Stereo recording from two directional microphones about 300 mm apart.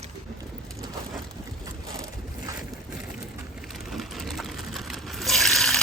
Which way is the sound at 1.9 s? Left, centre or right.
Centre.